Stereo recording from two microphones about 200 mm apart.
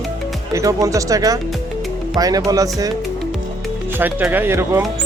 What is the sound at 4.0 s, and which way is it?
Speech, 10° right (ahead or behind).